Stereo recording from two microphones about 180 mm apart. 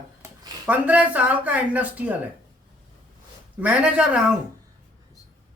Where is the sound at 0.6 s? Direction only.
10° right (ahead or behind).